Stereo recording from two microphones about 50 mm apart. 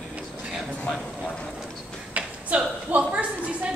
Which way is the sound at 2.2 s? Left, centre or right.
Right.